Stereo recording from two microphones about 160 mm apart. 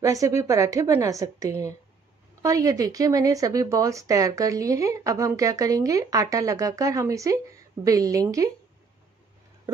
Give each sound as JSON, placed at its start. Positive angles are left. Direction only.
{"t": 0.0, "sound": "speech", "side_deg": -20}